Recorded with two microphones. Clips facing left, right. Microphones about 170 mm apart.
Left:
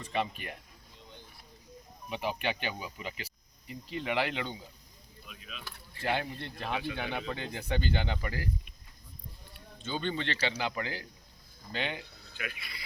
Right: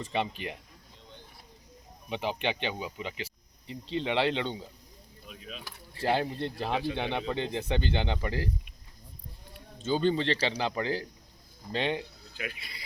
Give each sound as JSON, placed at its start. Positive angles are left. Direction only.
{"t": 0.0, "sound": "speech", "side_deg": -25}
{"t": 2.0, "sound": "speech", "side_deg": -25}
{"t": 9.7, "sound": "a man's voice", "side_deg": -40}